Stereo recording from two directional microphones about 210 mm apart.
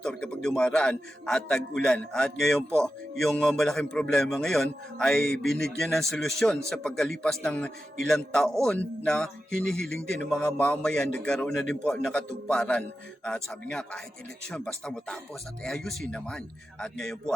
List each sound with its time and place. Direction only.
0.0 s a man's voice: 5° left (ahead or behind)